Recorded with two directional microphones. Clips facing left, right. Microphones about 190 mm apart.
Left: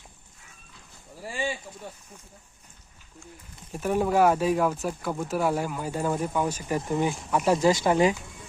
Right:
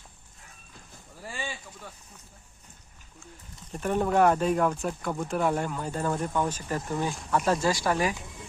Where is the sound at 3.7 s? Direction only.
5° left (ahead or behind); by 8.2 s 20° left (ahead or behind).